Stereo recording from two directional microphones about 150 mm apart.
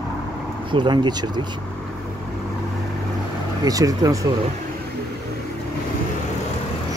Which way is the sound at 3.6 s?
25° right (ahead or behind).